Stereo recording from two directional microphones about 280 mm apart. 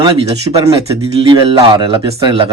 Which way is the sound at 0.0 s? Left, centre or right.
Centre.